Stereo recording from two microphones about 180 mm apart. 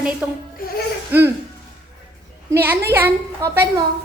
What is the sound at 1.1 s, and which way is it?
Speech, 10° right (ahead or behind).